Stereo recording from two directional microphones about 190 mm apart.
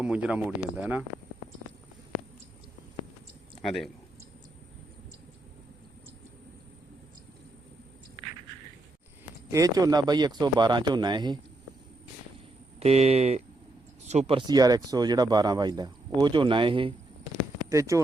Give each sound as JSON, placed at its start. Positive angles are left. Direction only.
{"t": 0.0, "sound": "speech", "side_deg": -5}
{"t": 3.6, "sound": "speech", "side_deg": 0}
{"t": 9.5, "sound": "speech", "side_deg": -15}
{"t": 12.8, "sound": "speech", "side_deg": -35}
{"t": 17.7, "sound": "speech", "side_deg": -15}